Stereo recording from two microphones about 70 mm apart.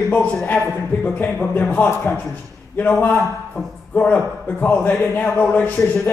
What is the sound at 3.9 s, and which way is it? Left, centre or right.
A man's voice, left.